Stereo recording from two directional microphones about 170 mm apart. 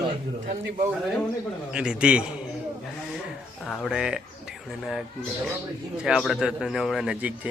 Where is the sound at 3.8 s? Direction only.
5° right (ahead or behind).